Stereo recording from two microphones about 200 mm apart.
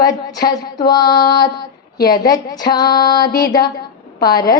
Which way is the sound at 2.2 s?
20° left (ahead or behind).